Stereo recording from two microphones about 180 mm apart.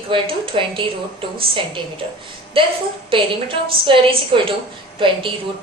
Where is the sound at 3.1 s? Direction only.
30° right (ahead or behind).